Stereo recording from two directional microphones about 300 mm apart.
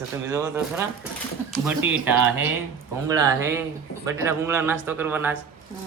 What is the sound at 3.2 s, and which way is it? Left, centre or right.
Speech, centre.